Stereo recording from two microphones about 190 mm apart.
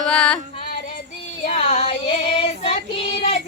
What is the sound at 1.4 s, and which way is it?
Child singing, 35° left (ahead or behind).